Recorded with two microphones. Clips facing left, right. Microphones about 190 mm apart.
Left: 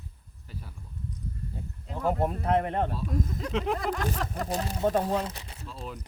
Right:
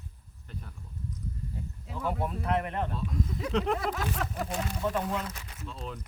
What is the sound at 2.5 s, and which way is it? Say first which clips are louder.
Speech: left 5 dB; 30° left (ahead or behind).